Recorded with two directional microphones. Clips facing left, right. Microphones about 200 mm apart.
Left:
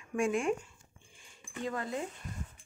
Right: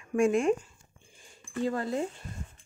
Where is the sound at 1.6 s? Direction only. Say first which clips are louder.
Right 6 dB; 35° right (ahead or behind).